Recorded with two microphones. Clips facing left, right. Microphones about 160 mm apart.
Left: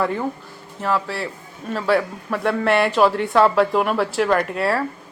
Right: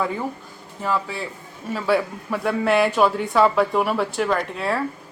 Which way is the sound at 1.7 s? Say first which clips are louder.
Left 1 dB; 5° right (ahead or behind).